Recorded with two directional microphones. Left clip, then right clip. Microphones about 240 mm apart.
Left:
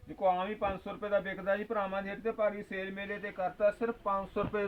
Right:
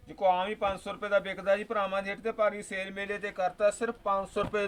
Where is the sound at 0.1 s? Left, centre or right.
Centre.